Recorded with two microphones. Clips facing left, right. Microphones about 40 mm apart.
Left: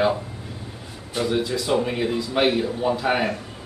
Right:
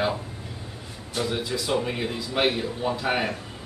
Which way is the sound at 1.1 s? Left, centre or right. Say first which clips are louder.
Left 4 dB; centre.